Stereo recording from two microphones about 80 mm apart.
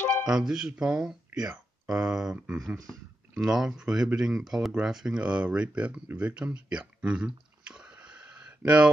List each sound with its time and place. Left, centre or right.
0.3 s speech: centre
2.3 s speech: centre
2.9 s speech: centre
6.0 s a sound: centre